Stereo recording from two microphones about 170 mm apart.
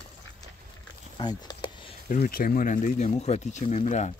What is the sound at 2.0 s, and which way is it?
Speech, 50° left (ahead or behind).